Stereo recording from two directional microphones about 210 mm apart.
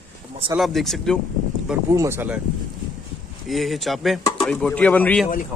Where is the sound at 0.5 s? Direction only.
Centre (ahead or behind).